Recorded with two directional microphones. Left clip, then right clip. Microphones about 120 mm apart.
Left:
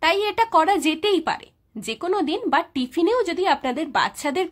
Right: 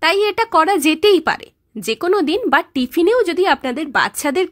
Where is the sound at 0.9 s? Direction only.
45° right (ahead or behind).